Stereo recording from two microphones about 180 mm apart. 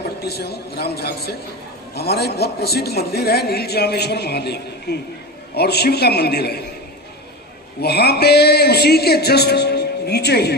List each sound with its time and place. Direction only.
0.0 s a man's voice: 65° left (ahead or behind)
7.8 s a man's voice: 65° left (ahead or behind)